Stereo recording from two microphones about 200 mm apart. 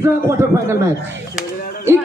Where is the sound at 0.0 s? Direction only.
10° right (ahead or behind).